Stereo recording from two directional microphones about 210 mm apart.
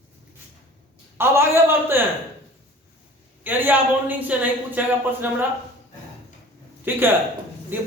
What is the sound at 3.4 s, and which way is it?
A woman's voice, 10° right (ahead or behind).